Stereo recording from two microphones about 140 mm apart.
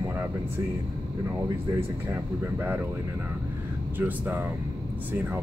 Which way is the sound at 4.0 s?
15° right (ahead or behind).